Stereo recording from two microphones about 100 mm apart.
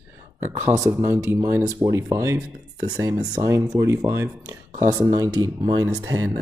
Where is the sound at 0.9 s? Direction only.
20° right (ahead or behind).